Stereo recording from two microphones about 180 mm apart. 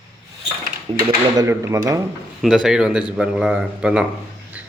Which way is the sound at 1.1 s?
20° right (ahead or behind).